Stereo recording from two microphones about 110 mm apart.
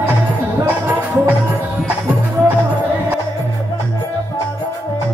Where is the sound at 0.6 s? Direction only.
15° right (ahead or behind).